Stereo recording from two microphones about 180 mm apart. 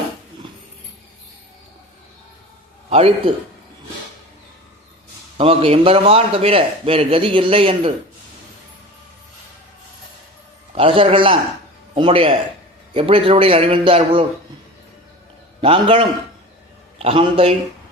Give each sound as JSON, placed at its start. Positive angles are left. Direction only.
{"t": 2.9, "sound": "a man's voice", "side_deg": -35}
{"t": 5.4, "sound": "a man's voice", "side_deg": -30}
{"t": 10.8, "sound": "a man's voice", "side_deg": -30}
{"t": 15.6, "sound": "a man's voice", "side_deg": -30}